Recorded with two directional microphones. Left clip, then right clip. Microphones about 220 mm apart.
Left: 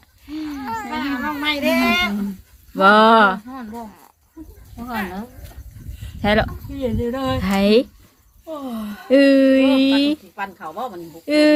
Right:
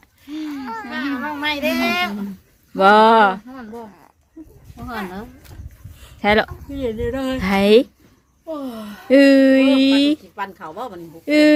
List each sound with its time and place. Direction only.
0.4 s babbling: centre (ahead or behind)
0.9 s baby cry: 45° right (ahead or behind)
1.4 s speech: 40° right (ahead or behind)
2.7 s speech: 10° right (ahead or behind)
6.2 s speech: 15° right (ahead or behind)
6.7 s speech: 55° right (ahead or behind)
7.3 s speech: 15° right (ahead or behind)
8.4 s speech: 50° right (ahead or behind)
9.0 s speech: 15° right (ahead or behind)
10.3 s speech: 55° right (ahead or behind)
11.3 s speech: 10° right (ahead or behind)